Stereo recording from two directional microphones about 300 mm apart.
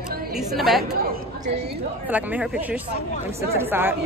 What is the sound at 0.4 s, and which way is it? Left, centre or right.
Speech, centre.